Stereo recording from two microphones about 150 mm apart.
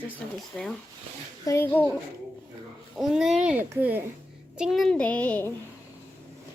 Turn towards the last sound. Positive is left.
turn(degrees=10)  # may be behind; listen again after turning